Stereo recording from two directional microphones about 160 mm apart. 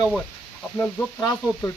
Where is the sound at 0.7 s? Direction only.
10° left (ahead or behind).